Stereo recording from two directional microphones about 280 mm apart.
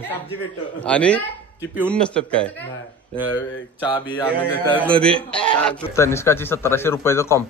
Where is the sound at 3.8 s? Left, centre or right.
Centre.